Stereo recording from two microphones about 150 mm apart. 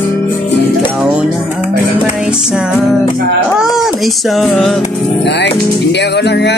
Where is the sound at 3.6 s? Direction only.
Centre (ahead or behind).